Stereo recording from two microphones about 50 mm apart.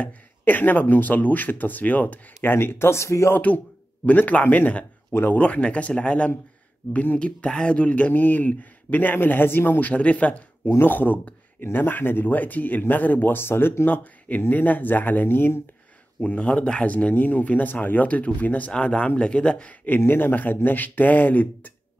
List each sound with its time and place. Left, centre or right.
0.5 s speech: left
2.5 s speech: left
3.3 s speech: left
8.1 s speech: left
9.8 s speech: left
10.8 s speech: left
13.8 s speech: left
16.2 s speech: left
18.7 s speech: left
20.1 s speech: left